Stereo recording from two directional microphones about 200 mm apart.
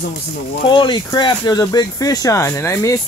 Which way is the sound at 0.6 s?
25° left (ahead or behind).